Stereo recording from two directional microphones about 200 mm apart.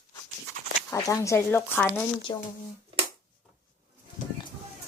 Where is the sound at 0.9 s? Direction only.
15° left (ahead or behind).